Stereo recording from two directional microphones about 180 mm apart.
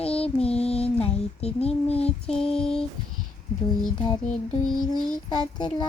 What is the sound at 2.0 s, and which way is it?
Child singing, 5° left (ahead or behind).